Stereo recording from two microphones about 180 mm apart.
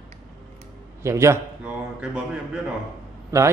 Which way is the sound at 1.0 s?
15° right (ahead or behind).